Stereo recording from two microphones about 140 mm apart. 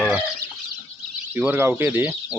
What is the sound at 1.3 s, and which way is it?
Speech, 10° right (ahead or behind).